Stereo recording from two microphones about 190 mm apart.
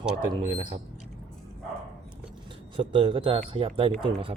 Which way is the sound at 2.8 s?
25° right (ahead or behind).